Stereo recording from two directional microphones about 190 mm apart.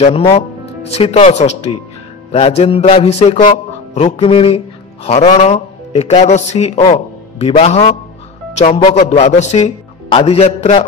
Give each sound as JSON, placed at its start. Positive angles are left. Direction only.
{"t": 0.0, "sound": "a man's voice", "side_deg": 30}